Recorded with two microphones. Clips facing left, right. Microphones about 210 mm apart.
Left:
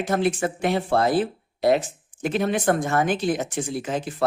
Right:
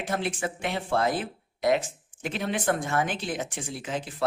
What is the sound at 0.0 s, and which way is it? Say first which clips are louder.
Speech: left 7 dB; 40° left (ahead or behind).